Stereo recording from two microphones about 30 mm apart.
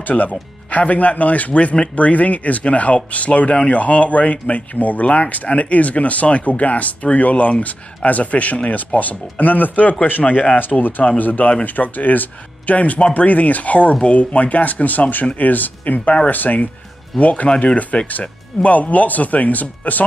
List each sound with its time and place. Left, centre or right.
0.1 s speech: left
8.6 s speech: left
10.0 s speech: left
10.4 s speech: left
12.7 s speech: left
17.2 s speech: left
17.9 s speech: left
18.6 s speech: left